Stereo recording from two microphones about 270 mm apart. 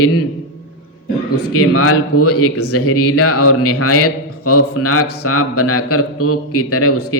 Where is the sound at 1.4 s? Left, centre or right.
Left.